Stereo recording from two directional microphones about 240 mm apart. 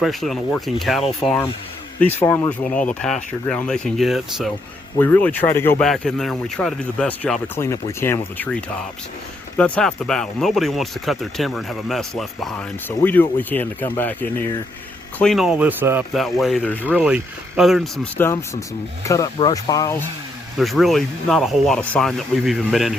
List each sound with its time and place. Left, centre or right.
0.0 s speech: centre
9.6 s speech: centre
20.6 s speech: centre